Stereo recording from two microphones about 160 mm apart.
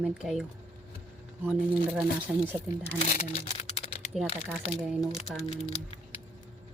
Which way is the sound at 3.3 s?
35° left (ahead or behind).